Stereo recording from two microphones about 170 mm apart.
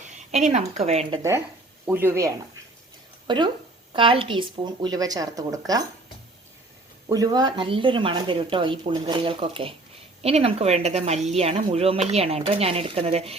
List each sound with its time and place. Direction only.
0.0 s a woman's voice: 45° right (ahead or behind)
1.9 s speech: 15° right (ahead or behind)
3.2 s speech: 25° right (ahead or behind)
7.1 s speech: 20° right (ahead or behind)